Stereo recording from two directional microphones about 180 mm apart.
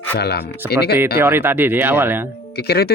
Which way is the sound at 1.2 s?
10° right (ahead or behind).